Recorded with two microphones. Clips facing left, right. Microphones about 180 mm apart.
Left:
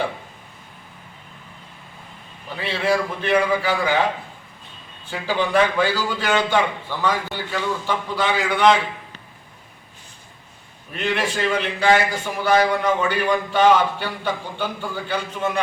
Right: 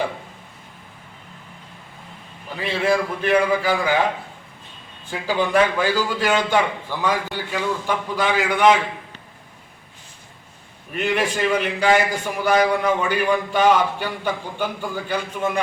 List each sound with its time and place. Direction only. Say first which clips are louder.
2.6 s a man's voice: right 1 dB; 10° right (ahead or behind)
5.0 s a man's voice: right 1 dB; 10° right (ahead or behind)
10.9 s a man's voice: right 2 dB; 10° right (ahead or behind)